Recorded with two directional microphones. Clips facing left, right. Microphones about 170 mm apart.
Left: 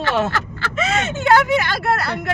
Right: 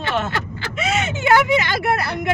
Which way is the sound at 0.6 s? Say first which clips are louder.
Left 1 dB; 10° right (ahead or behind).